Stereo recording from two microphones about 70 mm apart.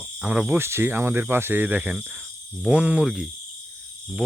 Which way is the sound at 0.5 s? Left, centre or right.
Right.